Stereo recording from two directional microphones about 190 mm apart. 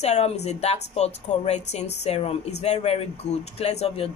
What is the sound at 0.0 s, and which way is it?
Speech, 35° left (ahead or behind).